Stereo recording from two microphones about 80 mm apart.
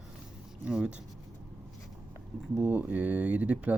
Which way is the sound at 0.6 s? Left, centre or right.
Centre.